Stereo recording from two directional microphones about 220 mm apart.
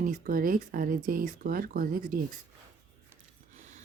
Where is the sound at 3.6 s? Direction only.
30° right (ahead or behind).